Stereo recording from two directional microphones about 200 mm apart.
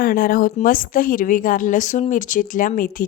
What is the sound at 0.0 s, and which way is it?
A woman's voice, 45° left (ahead or behind).